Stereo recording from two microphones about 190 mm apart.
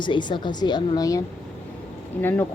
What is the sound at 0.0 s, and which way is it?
A woman's voice, 25° left (ahead or behind).